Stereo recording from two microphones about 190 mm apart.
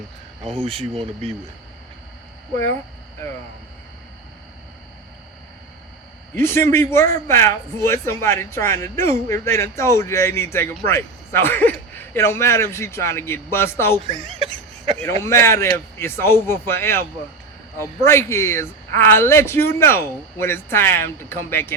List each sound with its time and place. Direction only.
0.6 s speech: 30° right (ahead or behind)
6.3 s speech: 10° left (ahead or behind)
14.1 s a sound: 30° right (ahead or behind)
14.9 s speech: 15° left (ahead or behind)